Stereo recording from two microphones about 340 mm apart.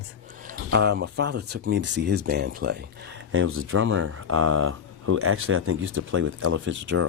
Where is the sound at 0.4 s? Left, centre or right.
Right.